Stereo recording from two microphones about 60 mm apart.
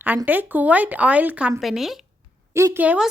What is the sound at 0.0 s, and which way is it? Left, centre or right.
Speech, right.